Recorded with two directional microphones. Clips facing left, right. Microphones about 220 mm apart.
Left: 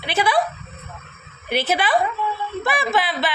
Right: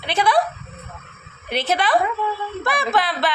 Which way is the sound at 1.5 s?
5° left (ahead or behind).